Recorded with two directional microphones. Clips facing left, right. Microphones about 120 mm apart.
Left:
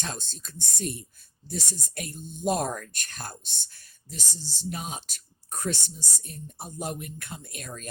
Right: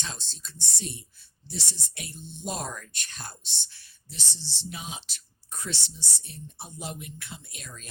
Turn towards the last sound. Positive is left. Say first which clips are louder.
# left 6 dB
turn(degrees=50)  # may be behind; listen again after turning